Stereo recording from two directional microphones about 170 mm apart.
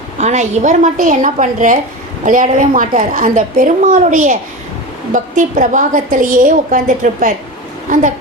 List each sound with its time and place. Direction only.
0.2 s a woman's voice: 45° right (ahead or behind)